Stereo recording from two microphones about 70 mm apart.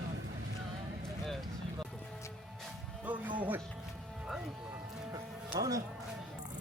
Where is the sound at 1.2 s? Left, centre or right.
Centre.